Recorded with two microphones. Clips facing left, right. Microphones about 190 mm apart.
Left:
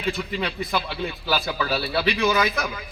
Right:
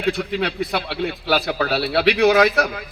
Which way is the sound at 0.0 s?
70° right (ahead or behind).